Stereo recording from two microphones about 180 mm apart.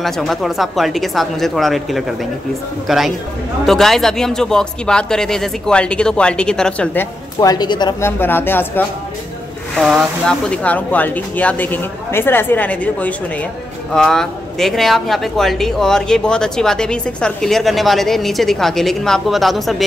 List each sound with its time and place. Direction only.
0.0 s a man's voice: centre (ahead or behind)
7.3 s speech: 20° left (ahead or behind)
8.2 s speech: 10° left (ahead or behind)
9.8 s a man's voice: centre (ahead or behind)